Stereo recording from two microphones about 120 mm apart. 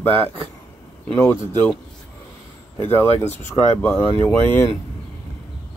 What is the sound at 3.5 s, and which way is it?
Speech, 10° left (ahead or behind).